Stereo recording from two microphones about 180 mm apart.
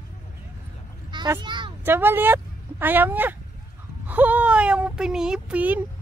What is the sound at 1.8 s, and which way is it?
Speech, 10° right (ahead or behind).